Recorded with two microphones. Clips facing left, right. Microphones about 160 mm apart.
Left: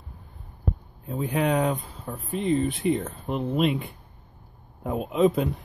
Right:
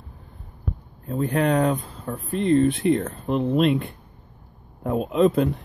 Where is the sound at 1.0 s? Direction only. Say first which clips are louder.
Right 3 dB; 5° left (ahead or behind).